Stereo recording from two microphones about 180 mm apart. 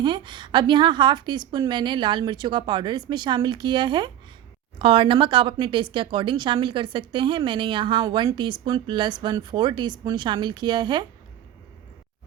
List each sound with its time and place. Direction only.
0.0 s a woman's voice: 25° right (ahead or behind)